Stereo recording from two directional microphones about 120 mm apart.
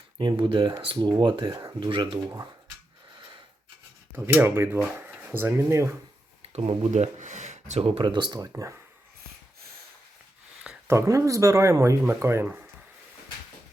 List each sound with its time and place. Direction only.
0.2 s speech: 40° right (ahead or behind)
1.9 s speech: 45° right (ahead or behind)
4.1 s speech: 15° right (ahead or behind)
6.5 s speech: 60° right (ahead or behind); by 8.7 s 30° right (ahead or behind)
10.8 s speech: 25° right (ahead or behind)